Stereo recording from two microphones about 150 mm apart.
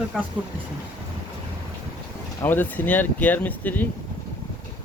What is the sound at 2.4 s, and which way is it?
Speech, 15° left (ahead or behind).